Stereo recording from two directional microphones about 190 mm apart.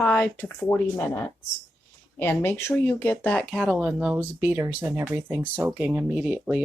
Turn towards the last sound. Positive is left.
turn(degrees=-5)  # may be behind; listen again after turning